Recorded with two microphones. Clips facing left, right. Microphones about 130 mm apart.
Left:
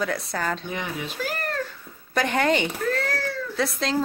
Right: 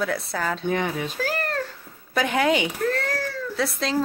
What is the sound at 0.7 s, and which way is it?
Speech, 50° right (ahead or behind).